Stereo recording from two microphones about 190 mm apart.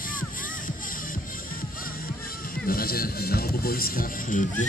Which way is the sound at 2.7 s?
50° left (ahead or behind).